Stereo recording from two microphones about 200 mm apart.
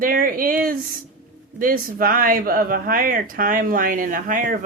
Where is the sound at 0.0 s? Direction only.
45° right (ahead or behind).